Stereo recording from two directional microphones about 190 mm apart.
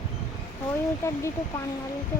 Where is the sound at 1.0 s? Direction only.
15° left (ahead or behind).